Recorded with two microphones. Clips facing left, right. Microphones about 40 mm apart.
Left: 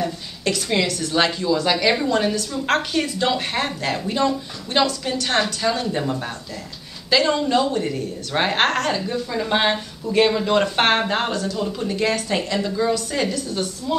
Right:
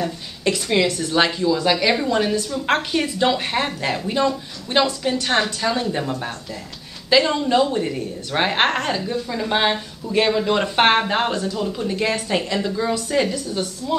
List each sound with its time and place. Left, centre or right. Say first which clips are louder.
0.4 s a sound: right 2 dB; right
0.8 s a woman's voice: right 3 dB; right
1.1 s a woman's voice: even; centre
8.5 s a woman's voice: left 1 dB; centre
8.9 s a woman's voice: even; centre